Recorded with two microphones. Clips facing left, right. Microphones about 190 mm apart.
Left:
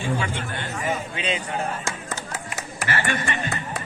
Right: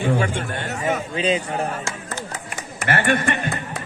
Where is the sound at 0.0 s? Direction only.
50° right (ahead or behind).